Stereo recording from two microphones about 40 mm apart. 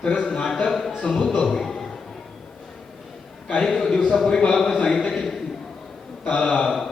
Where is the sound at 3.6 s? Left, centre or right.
Centre.